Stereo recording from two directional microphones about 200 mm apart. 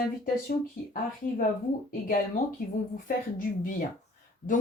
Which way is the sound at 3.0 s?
45° left (ahead or behind).